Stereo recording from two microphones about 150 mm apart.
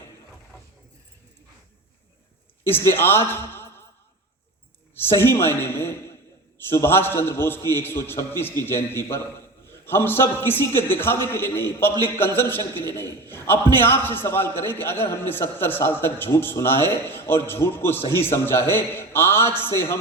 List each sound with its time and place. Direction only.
2.6 s a man's voice: 15° left (ahead or behind)
5.0 s a man's voice: 15° left (ahead or behind)